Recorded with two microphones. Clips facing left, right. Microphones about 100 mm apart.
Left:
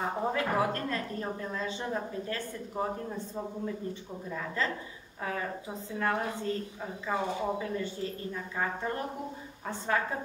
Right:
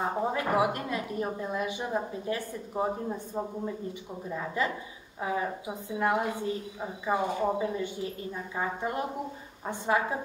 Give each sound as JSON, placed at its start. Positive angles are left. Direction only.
{"t": 0.0, "sound": "a woman's voice", "side_deg": -10}